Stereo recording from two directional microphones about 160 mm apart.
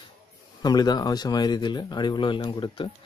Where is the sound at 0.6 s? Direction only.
25° left (ahead or behind).